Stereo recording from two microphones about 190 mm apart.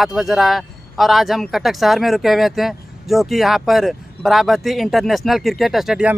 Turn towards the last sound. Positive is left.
turn(degrees=-5)  # may be behind; listen again after turning